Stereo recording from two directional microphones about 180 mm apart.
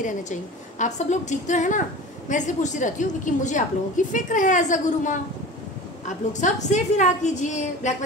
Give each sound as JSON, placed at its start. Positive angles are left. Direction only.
{"t": 0.0, "sound": "a woman's voice", "side_deg": 45}